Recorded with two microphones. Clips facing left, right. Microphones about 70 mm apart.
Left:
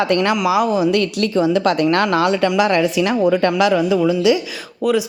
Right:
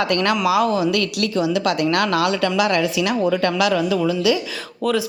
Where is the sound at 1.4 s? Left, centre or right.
Left.